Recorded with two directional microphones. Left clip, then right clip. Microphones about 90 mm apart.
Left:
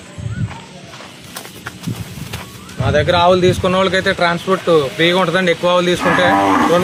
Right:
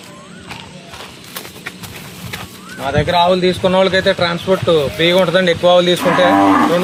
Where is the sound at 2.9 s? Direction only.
90° left.